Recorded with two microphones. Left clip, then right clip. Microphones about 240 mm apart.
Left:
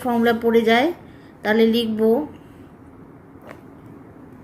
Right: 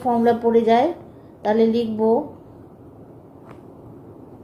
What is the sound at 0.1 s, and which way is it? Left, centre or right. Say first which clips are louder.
A woman's voice: right 1 dB; left.